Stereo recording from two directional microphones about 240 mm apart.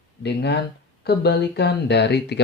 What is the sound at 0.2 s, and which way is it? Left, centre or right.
Speech, left.